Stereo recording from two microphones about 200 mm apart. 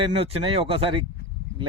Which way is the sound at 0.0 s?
30° right (ahead or behind).